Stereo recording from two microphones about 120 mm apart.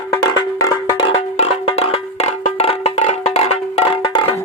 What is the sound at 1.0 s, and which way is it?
Music, 55° left (ahead or behind).